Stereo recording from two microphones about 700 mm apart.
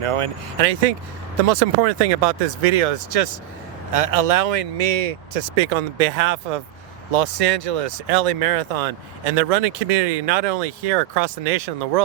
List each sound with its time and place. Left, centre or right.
0.0 s speech: right